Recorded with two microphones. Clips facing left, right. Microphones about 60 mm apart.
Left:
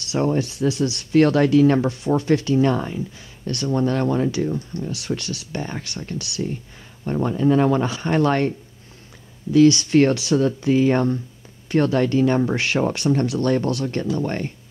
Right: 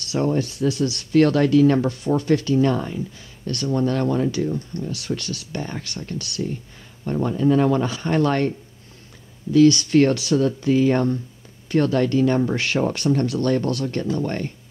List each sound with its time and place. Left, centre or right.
0.1 s speech: left
9.5 s speech: left